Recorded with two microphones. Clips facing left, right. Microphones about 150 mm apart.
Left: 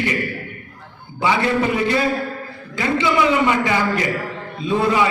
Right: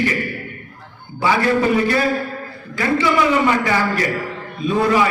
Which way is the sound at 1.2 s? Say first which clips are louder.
Right 2 dB; 20° left (ahead or behind).